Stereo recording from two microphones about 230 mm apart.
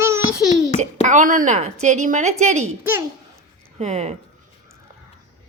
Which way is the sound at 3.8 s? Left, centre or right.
Right.